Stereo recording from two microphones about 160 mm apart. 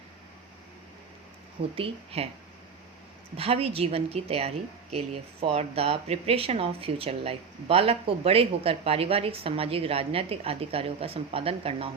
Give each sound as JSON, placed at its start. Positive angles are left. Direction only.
{"t": 1.7, "sound": "speech", "side_deg": -35}
{"t": 3.3, "sound": "speech", "side_deg": -40}